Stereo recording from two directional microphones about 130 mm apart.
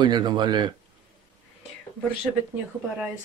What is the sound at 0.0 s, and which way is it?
Speech, 35° right (ahead or behind).